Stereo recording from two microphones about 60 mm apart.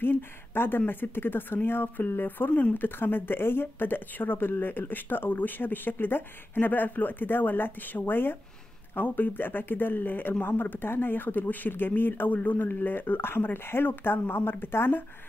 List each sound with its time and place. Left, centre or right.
0.6 s speech: left